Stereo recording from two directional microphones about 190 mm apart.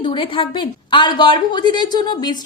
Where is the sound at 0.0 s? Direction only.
25° left (ahead or behind).